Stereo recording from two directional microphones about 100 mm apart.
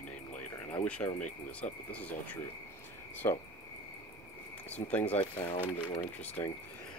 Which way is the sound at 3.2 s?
25° left (ahead or behind).